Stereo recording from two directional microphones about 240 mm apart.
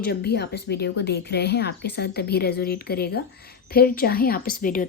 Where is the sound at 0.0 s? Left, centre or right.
Left.